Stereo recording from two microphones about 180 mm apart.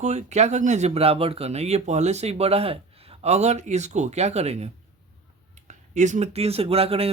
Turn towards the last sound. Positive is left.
turn(degrees=-35)  # may be behind; listen again after turning